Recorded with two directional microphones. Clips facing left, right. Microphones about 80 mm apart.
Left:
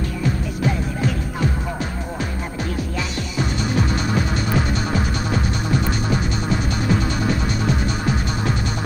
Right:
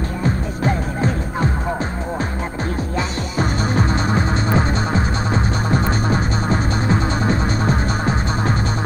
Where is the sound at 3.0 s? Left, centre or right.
Right.